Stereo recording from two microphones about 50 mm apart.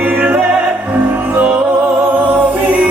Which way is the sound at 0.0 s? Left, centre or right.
Right.